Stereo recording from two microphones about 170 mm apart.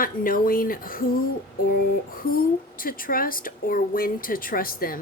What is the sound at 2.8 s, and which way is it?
Speech, 55° left (ahead or behind).